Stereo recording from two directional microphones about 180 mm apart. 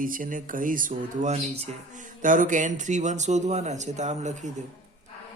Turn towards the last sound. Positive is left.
turn(degrees=-40)  # may be behind; listen again after turning